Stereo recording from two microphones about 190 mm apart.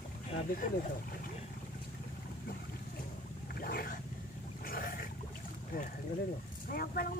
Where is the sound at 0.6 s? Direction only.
45° left (ahead or behind).